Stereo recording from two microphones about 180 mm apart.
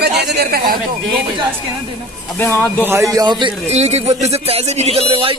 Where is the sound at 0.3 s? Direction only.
60° right (ahead or behind).